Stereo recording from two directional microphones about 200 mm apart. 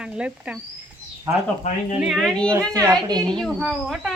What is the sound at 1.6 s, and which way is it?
Speech, 35° left (ahead or behind).